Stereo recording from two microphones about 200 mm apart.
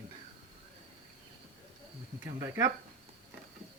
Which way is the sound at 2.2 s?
20° right (ahead or behind).